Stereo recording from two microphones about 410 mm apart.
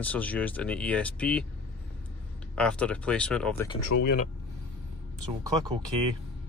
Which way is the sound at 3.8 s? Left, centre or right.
Left.